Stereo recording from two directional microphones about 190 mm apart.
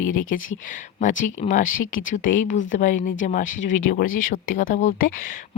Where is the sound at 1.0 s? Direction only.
40° left (ahead or behind).